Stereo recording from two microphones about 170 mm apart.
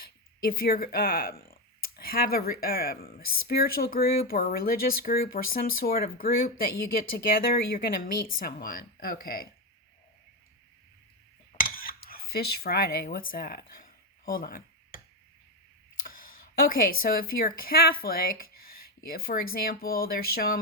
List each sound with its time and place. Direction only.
0.0 s speech: 60° left (ahead or behind)
11.5 s cutlery: 55° left (ahead or behind)
16.0 s speech: 55° left (ahead or behind)